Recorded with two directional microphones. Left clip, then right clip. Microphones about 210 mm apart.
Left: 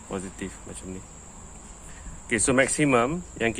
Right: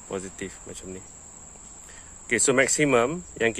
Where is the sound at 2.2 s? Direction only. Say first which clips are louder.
Right 1 dB; 50° right (ahead or behind).